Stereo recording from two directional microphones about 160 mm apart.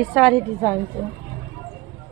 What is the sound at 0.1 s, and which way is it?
Speech, centre (ahead or behind).